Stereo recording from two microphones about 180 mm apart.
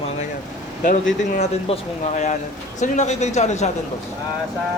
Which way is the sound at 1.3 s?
40° left (ahead or behind).